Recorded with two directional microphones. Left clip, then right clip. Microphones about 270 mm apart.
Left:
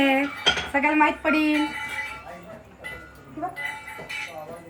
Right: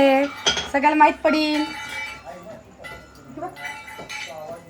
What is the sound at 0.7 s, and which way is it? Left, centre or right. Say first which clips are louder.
Speech: right 7 dB; right.